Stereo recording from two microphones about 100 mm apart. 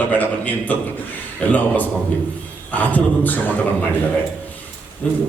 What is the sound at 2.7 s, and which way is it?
Speech, 15° left (ahead or behind).